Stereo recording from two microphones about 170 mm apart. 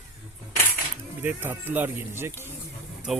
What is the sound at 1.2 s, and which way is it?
Speech, 10° right (ahead or behind).